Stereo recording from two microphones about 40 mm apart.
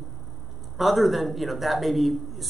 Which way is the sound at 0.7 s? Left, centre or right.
Centre.